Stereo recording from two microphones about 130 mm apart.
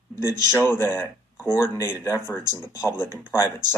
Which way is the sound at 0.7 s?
15° left (ahead or behind).